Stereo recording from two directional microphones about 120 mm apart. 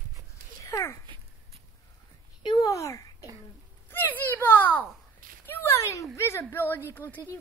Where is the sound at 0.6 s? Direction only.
25° left (ahead or behind).